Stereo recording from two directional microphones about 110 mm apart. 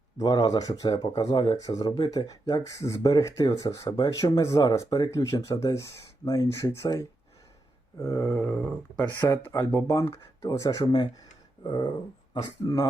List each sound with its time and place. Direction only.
0.2 s speech: 35° left (ahead or behind)
3.8 s speech: 40° left (ahead or behind)
11.6 s a sound: 45° left (ahead or behind)
12.3 s speech: 35° left (ahead or behind)